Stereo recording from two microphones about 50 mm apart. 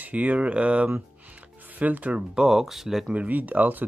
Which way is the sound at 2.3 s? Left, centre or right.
Centre.